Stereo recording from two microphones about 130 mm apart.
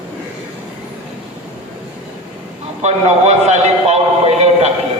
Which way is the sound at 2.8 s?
60° right (ahead or behind).